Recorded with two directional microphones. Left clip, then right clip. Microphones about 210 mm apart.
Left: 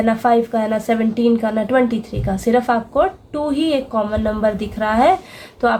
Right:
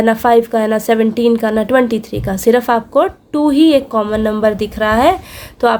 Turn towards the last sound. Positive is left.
turn(degrees=-40)  # may be behind; listen again after turning